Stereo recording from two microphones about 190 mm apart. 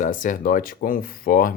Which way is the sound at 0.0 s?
45° left (ahead or behind).